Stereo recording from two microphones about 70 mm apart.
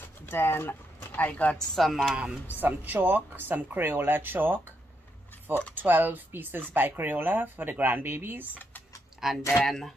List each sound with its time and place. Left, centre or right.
0.3 s speech: left
1.8 s speech: centre
2.6 s speech: right
5.8 s speech: right
9.2 s speech: centre